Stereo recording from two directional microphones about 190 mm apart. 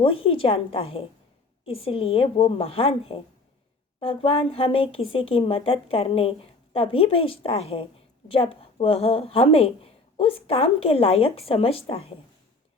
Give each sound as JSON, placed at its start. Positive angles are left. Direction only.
{"t": 0.0, "sound": "speech", "side_deg": 30}